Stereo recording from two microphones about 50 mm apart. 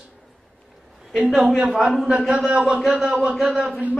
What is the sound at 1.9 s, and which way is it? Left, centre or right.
A man's voice, centre.